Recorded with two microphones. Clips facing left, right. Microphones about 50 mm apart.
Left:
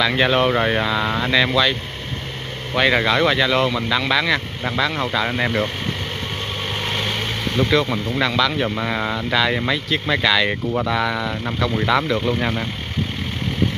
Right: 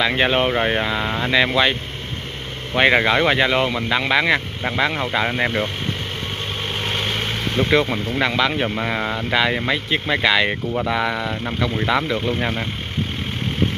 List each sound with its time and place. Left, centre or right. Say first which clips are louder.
0.0 s speech: left 1 dB; centre
2.8 s speech: right 1 dB; right
6.7 s vehicle: even; centre
8.6 s speech: even; centre
9.8 s speech: right 1 dB; centre